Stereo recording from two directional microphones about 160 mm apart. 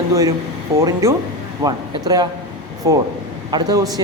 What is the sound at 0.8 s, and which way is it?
Speech, 20° right (ahead or behind).